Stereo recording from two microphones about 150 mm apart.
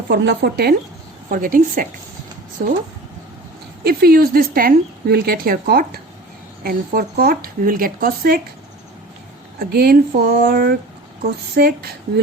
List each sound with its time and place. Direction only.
0.1 s speech: 90° right
1.3 s a woman's voice: 65° right (ahead or behind)
3.8 s speech: 90° right
9.6 s speech: 90° right